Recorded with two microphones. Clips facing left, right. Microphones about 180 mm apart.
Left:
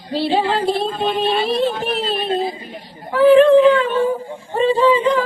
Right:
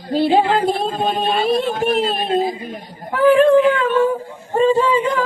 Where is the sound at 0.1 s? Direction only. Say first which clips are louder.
Right 4 dB; 50° right (ahead or behind).